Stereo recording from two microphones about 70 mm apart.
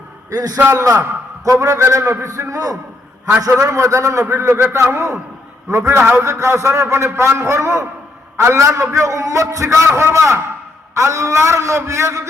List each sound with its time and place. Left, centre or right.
0.3 s a man's voice: right
1.5 s a man's voice: right
2.2 s a man's voice: right
4.4 s a man's voice: right
6.1 s a man's voice: right